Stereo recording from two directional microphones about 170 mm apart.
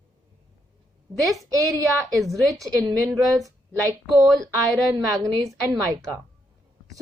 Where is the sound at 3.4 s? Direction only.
20° right (ahead or behind).